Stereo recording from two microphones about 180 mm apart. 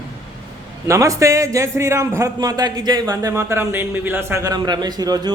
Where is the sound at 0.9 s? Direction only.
20° right (ahead or behind).